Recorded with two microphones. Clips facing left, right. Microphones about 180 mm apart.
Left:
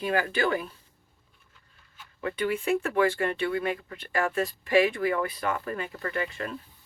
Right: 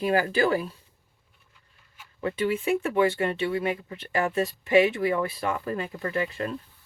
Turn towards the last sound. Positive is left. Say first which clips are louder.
# right 3 dB
turn(degrees=-30)  # may be behind; listen again after turning